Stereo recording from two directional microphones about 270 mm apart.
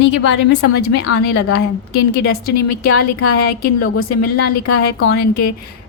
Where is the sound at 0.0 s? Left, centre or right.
Left.